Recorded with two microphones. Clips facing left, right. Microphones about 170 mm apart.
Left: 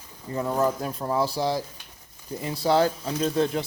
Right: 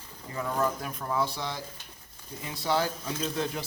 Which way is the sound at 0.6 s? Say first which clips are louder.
Left 4 dB; 30° left (ahead or behind).